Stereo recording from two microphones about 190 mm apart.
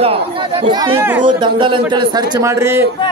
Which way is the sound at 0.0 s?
30° right (ahead or behind).